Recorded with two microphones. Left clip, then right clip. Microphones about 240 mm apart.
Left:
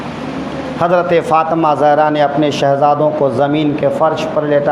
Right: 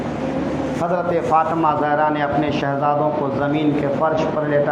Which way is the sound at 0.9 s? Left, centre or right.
Left.